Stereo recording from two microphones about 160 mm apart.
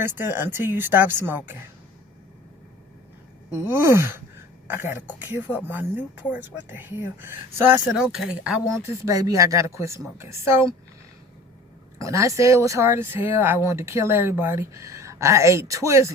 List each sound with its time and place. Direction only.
0.0 s speech: 15° right (ahead or behind)
3.7 s speech: 15° right (ahead or behind)
9.0 s speech: 20° right (ahead or behind)
11.9 s speech: 20° right (ahead or behind)